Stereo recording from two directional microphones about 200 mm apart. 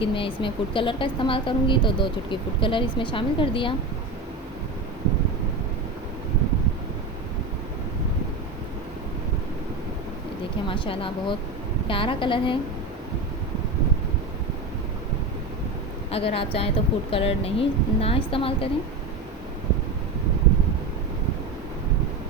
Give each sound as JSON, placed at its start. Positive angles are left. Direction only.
{"t": 0.0, "sound": "a woman's voice", "side_deg": 25}
{"t": 10.7, "sound": "a woman's voice", "side_deg": 25}
{"t": 16.1, "sound": "a woman's voice", "side_deg": 30}